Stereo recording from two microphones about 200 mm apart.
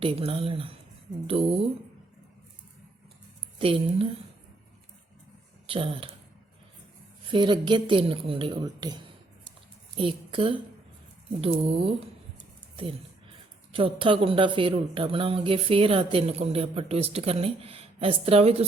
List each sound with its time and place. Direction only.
0.0 s speech: 25° right (ahead or behind)
3.6 s speech: 30° right (ahead or behind)
5.6 s speech: 25° right (ahead or behind)
7.3 s speech: 25° right (ahead or behind)
10.0 s speech: 25° right (ahead or behind)
13.7 s speech: 25° right (ahead or behind)